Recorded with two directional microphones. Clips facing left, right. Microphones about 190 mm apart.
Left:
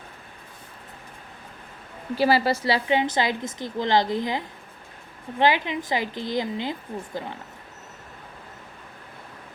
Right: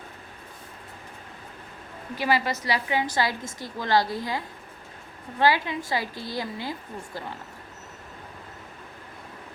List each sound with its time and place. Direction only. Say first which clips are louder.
2.1 s a woman's voice: left 5 dB; 30° left (ahead or behind)